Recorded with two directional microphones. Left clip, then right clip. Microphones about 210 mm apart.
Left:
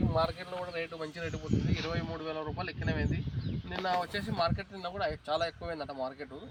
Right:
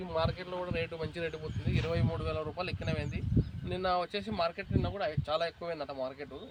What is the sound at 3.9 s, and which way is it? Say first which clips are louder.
Speech: even; 25° right (ahead or behind).